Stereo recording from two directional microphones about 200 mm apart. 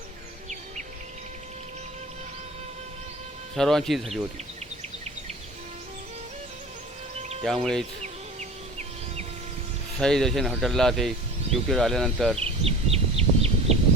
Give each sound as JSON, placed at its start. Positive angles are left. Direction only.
{"t": 3.5, "sound": "speech", "side_deg": 0}
{"t": 7.4, "sound": "speech", "side_deg": 5}
{"t": 10.0, "sound": "speech", "side_deg": 0}
{"t": 12.4, "sound": "a sound", "side_deg": -30}